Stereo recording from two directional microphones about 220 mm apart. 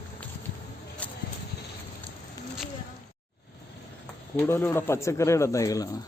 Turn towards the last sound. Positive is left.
turn(degrees=15)  # may be behind; listen again after turning